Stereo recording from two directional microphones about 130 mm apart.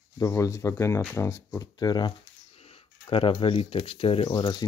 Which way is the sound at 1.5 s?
30° left (ahead or behind).